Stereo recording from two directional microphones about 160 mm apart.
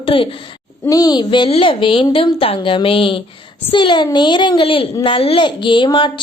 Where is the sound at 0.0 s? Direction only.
35° left (ahead or behind).